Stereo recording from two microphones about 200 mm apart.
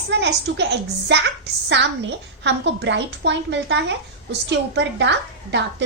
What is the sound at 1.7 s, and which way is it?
A child's voice, 60° right (ahead or behind).